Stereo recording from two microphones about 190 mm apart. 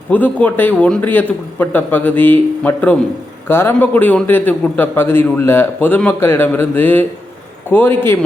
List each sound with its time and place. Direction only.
0.1 s a man's voice: 10° left (ahead or behind)